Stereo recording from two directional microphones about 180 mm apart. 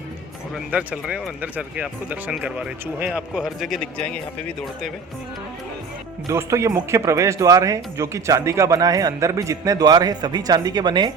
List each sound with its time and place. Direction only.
0.5 s speech: 5° right (ahead or behind)
6.2 s speech: 15° right (ahead or behind)